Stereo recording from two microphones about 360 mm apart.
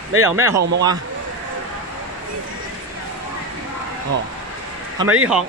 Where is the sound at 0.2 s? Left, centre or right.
Centre.